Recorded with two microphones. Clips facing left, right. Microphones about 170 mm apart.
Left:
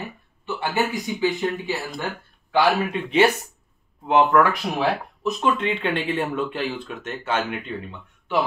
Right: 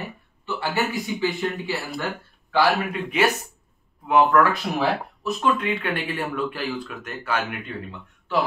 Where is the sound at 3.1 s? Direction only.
30° left (ahead or behind).